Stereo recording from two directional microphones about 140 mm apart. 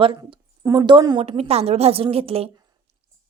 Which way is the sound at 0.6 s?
25° right (ahead or behind).